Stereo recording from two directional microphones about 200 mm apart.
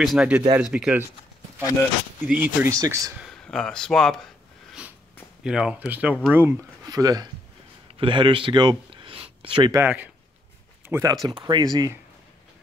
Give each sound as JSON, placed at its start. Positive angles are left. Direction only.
{"t": 0.0, "sound": "speech", "side_deg": 0}
{"t": 1.6, "sound": "speech", "side_deg": 15}
{"t": 2.2, "sound": "speech", "side_deg": -10}
{"t": 3.2, "sound": "speech", "side_deg": 0}
{"t": 5.4, "sound": "speech", "side_deg": -5}
{"t": 9.8, "sound": "speech", "side_deg": -10}
{"t": 11.2, "sound": "speech", "side_deg": -20}